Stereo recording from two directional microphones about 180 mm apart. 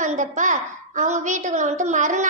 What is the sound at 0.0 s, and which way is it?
A woman's voice, 45° right (ahead or behind).